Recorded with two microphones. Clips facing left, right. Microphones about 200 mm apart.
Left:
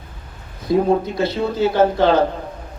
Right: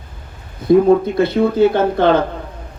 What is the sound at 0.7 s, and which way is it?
Speech, 55° right (ahead or behind).